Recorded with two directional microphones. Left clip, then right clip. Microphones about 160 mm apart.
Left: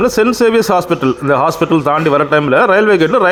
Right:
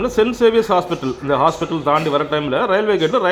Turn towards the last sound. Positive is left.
turn(degrees=40)  # may be behind; listen again after turning